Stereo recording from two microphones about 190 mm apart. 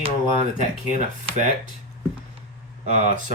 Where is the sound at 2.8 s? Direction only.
40° right (ahead or behind).